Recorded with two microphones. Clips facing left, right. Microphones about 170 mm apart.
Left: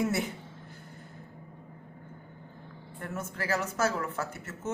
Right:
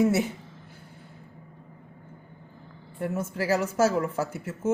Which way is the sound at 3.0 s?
10° right (ahead or behind).